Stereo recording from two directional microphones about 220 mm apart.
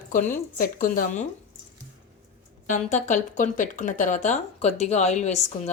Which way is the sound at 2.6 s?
35° left (ahead or behind).